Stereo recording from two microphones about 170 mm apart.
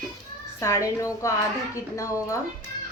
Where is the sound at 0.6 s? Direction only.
20° left (ahead or behind).